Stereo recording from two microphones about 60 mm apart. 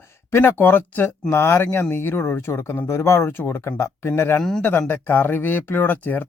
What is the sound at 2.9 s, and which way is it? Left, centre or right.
Speech, left.